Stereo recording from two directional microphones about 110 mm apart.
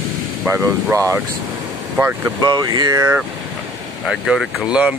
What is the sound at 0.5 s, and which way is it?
Speech, 25° right (ahead or behind).